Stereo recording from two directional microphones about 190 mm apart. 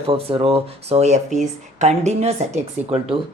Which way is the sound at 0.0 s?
30° right (ahead or behind).